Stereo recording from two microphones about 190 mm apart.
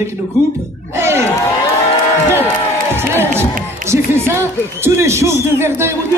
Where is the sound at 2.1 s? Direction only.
10° left (ahead or behind).